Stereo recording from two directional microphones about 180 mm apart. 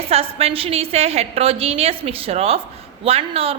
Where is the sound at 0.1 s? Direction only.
35° right (ahead or behind).